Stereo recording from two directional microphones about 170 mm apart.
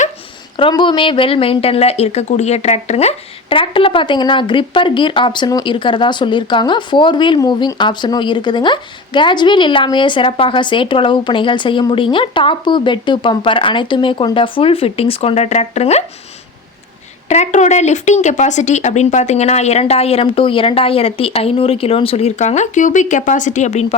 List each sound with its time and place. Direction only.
0.5 s a woman's voice: 30° left (ahead or behind)
17.2 s speech: 40° left (ahead or behind)